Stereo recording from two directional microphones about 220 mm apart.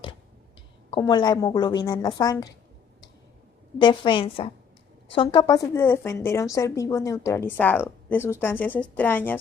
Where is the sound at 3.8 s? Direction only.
20° left (ahead or behind).